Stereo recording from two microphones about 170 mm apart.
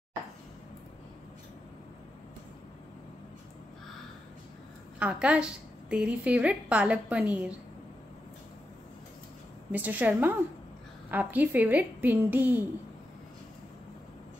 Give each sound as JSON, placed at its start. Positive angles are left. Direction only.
{"t": 4.9, "sound": "a woman's voice", "side_deg": -5}
{"t": 9.7, "sound": "a woman's voice", "side_deg": -10}